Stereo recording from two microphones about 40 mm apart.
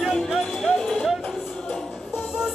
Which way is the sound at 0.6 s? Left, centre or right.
Centre.